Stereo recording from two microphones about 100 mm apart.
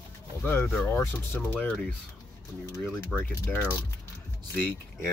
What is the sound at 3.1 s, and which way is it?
Speech, 20° left (ahead or behind).